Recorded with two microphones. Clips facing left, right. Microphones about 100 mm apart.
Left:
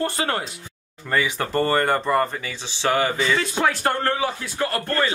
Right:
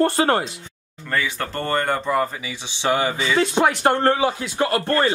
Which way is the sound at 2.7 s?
20° right (ahead or behind).